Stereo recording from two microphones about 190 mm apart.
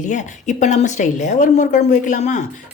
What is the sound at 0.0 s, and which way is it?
A woman's voice, 40° left (ahead or behind).